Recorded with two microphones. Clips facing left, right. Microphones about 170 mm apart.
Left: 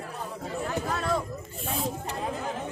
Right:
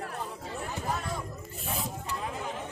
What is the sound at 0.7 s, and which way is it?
Speech, 80° left.